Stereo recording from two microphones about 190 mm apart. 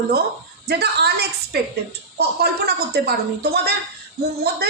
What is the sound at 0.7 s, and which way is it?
A woman's voice, 60° right (ahead or behind).